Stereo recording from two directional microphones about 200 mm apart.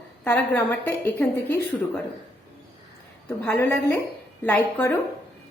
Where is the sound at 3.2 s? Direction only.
10° left (ahead or behind).